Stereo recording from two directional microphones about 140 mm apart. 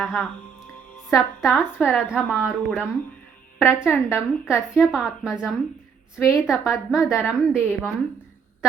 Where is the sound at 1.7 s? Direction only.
15° left (ahead or behind).